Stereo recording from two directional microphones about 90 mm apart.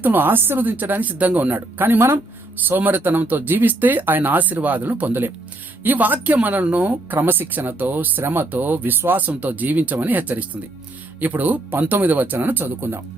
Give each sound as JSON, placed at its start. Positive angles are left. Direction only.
{"t": 0.0, "sound": "speech", "side_deg": -20}